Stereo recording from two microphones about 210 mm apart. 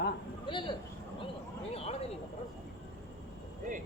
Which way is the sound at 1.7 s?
30° left (ahead or behind).